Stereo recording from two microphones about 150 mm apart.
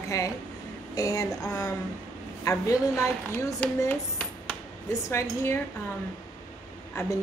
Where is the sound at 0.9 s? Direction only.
25° left (ahead or behind).